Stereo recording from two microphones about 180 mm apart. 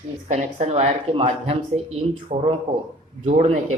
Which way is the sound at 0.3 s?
35° right (ahead or behind).